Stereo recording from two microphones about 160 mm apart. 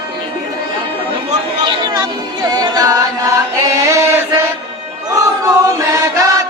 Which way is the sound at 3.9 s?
15° right (ahead or behind).